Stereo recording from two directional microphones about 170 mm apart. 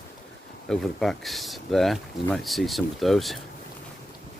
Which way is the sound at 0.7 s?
Centre (ahead or behind).